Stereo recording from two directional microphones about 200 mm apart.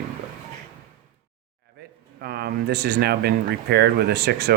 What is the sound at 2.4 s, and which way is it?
Speech, 55° right (ahead or behind).